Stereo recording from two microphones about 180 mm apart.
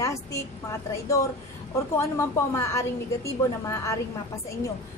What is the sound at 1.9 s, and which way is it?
A woman's voice, 15° left (ahead or behind).